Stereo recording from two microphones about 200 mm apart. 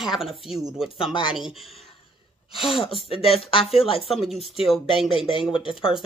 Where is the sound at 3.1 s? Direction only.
30° left (ahead or behind).